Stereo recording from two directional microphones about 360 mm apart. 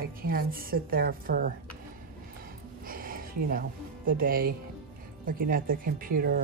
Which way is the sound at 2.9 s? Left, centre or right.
Right.